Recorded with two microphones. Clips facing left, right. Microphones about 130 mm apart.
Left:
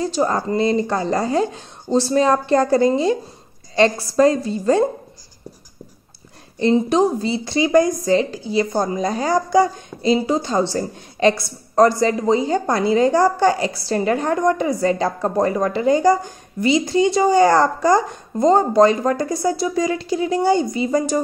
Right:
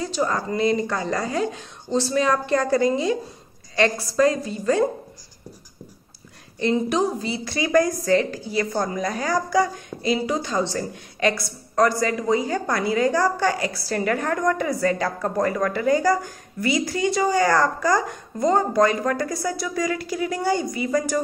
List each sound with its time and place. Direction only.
0.0 s speech: 35° left (ahead or behind)
6.6 s speech: 30° left (ahead or behind)